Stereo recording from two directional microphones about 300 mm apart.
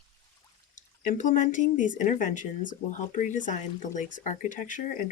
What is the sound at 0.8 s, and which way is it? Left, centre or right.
Speech, left.